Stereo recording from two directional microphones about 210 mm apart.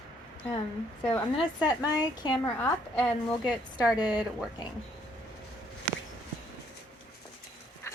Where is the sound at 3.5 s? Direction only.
20° left (ahead or behind).